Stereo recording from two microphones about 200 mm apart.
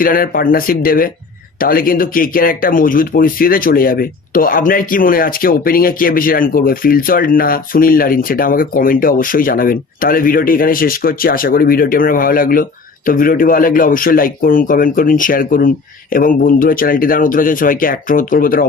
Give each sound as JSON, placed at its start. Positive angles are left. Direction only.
{"t": 0.0, "sound": "speech", "side_deg": 45}